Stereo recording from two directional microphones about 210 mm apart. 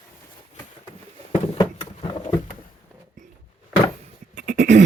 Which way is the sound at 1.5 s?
25° left (ahead or behind).